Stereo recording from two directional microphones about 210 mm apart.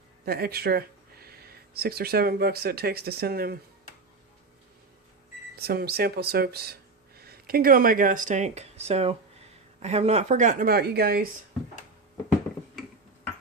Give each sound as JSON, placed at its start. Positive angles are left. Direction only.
{"t": 0.3, "sound": "speech", "side_deg": -45}
{"t": 5.5, "sound": "a woman's voice", "side_deg": -50}